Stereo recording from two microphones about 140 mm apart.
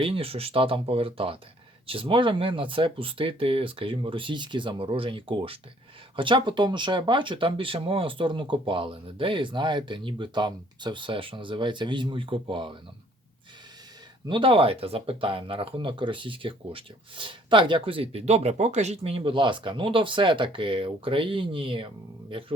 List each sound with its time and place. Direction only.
0.0 s speech: 40° right (ahead or behind)
14.3 s speech: 35° right (ahead or behind)